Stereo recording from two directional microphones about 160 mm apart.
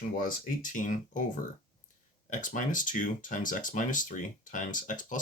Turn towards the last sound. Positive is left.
turn(degrees=55)  # may be behind; listen again after turning